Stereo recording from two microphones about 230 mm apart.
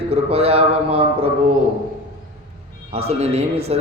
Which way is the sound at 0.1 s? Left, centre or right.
Right.